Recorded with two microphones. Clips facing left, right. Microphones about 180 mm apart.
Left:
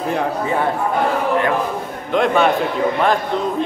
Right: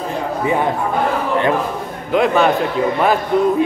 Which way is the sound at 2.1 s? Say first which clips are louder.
Right 1 dB; centre (ahead or behind).